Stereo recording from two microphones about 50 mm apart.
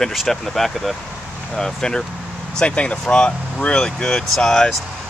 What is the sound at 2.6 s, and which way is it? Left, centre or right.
Speech, left.